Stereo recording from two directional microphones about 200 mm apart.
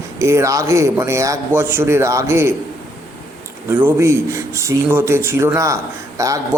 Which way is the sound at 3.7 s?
10° right (ahead or behind).